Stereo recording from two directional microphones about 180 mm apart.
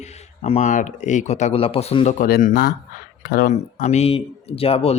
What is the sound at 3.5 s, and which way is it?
A man's voice, 40° left (ahead or behind).